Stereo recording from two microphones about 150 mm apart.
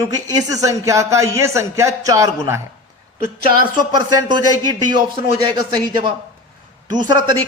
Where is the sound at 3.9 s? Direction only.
25° right (ahead or behind).